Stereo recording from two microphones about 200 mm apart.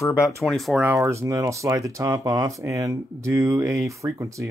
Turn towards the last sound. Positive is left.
turn(degrees=-15)  # may be behind; listen again after turning